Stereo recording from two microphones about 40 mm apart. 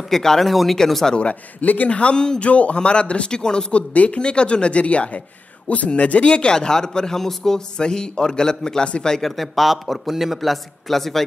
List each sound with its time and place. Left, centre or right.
0.1 s a man's voice: centre
1.3 s a man's voice: left
1.9 s a man's voice: left
2.4 s a man's voice: left
3.9 s a man's voice: left
4.2 s a man's voice: left
9.1 s a man's voice: centre